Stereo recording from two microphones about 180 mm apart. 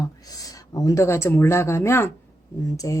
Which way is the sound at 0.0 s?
20° left (ahead or behind).